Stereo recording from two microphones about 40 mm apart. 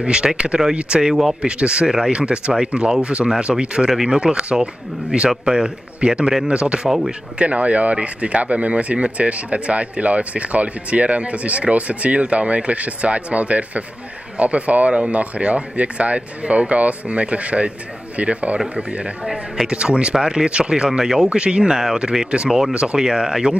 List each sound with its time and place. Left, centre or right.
0.0 s speech: right
2.1 s speech: right
21.3 s speech: right
22.5 s speech: centre